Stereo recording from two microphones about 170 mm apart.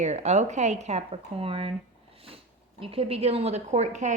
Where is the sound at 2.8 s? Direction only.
35° right (ahead or behind).